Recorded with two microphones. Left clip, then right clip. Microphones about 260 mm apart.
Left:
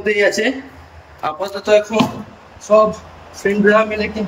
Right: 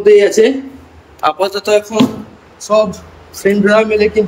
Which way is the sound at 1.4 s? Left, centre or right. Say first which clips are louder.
Left 2 dB; right.